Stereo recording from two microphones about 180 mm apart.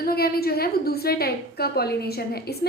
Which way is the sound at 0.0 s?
60° left (ahead or behind).